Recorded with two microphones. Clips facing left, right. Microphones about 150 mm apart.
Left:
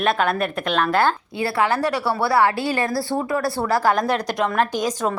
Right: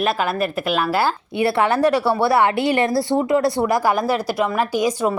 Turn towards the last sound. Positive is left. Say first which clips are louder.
# right 2 dB
turn(degrees=-10)  # may be behind; listen again after turning